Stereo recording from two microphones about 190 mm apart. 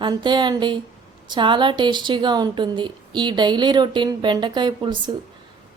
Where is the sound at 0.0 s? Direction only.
25° right (ahead or behind).